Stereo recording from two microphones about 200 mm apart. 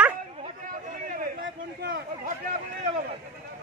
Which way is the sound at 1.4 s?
50° right (ahead or behind).